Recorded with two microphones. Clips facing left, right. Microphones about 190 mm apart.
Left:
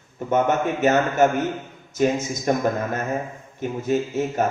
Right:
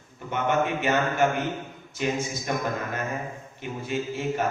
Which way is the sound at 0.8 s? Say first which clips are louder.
Left 9 dB; 45° left (ahead or behind).